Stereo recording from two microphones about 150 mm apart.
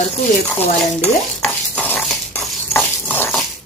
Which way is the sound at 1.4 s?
5° left (ahead or behind).